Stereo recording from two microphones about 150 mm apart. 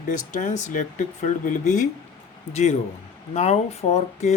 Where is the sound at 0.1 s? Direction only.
55° left (ahead or behind).